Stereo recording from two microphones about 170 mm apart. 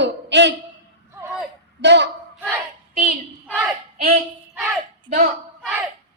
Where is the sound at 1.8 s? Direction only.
90° right.